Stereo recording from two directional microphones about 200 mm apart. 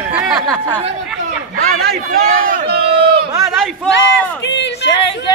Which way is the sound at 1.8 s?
45° right (ahead or behind).